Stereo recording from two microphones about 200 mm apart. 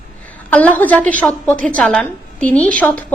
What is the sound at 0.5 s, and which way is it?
A woman's voice, 10° left (ahead or behind).